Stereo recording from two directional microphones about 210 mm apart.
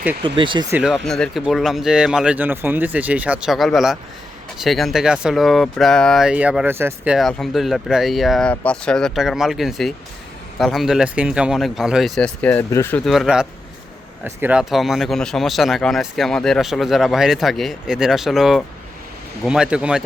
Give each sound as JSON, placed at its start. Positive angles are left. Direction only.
{"t": 0.2, "sound": "speech", "side_deg": -25}
{"t": 0.7, "sound": "speech", "side_deg": -5}
{"t": 13.1, "sound": "speech", "side_deg": 0}